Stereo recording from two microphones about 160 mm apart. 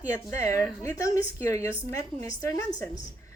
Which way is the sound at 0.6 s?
15° left (ahead or behind).